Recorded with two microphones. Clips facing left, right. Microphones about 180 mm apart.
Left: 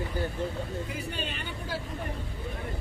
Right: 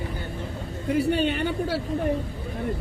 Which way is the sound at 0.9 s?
65° right (ahead or behind).